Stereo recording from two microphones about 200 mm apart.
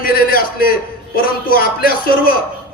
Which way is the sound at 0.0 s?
45° left (ahead or behind).